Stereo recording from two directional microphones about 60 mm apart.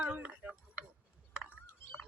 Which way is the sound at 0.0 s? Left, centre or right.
Right.